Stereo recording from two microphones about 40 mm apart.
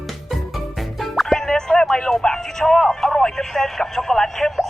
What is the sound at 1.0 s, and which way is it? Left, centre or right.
Music, centre.